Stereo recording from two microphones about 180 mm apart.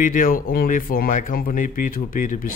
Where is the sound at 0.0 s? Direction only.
50° left (ahead or behind).